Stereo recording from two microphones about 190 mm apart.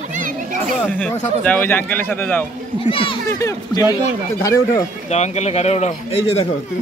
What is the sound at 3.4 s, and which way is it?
Speech, 15° left (ahead or behind).